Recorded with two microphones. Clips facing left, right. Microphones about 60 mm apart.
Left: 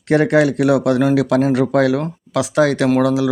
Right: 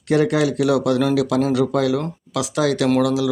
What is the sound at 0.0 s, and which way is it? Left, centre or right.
Speech, left.